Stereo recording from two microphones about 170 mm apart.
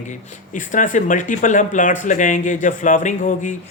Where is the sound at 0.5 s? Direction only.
50° left (ahead or behind).